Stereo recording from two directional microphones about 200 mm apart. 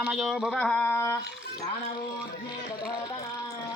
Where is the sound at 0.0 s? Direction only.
5° right (ahead or behind); by 1.2 s 15° left (ahead or behind).